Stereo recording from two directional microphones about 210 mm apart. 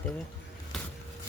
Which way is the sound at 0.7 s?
Centre (ahead or behind).